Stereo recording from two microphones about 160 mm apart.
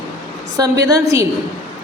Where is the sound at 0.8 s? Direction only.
20° right (ahead or behind).